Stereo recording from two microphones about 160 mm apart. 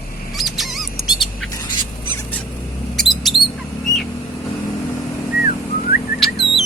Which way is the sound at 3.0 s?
Centre (ahead or behind).